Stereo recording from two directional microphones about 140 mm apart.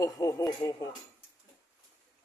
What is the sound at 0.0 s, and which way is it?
Speech, 25° left (ahead or behind).